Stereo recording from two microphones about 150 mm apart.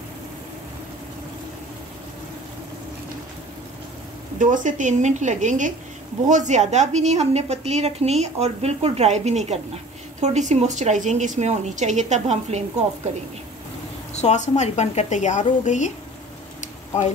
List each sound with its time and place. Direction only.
4.4 s a woman's voice: 60° right (ahead or behind)
14.1 s speech: 50° left (ahead or behind)